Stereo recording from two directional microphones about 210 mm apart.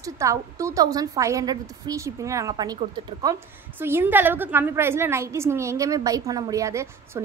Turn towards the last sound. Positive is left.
turn(degrees=-15)  # may be behind; listen again after turning